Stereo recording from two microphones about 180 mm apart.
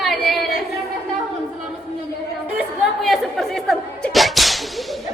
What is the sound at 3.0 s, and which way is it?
Chatter, centre (ahead or behind).